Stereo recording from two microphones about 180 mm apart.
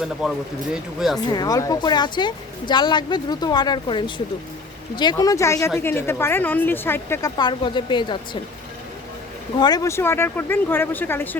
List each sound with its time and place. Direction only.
0.0 s speech: 5° right (ahead or behind)
1.3 s speech: 20° left (ahead or behind)
9.6 s speech: 20° left (ahead or behind)